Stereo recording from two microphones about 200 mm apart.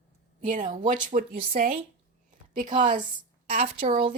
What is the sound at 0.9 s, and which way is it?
Speech, 40° right (ahead or behind).